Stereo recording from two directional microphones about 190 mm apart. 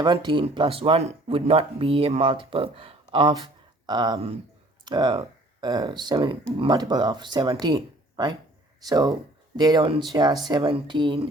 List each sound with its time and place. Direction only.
0.0 s speech: 25° right (ahead or behind)